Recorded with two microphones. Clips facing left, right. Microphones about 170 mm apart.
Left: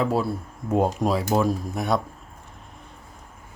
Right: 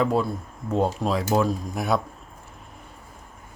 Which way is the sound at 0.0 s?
5° left (ahead or behind).